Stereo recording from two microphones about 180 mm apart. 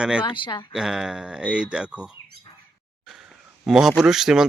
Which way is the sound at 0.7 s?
Centre (ahead or behind).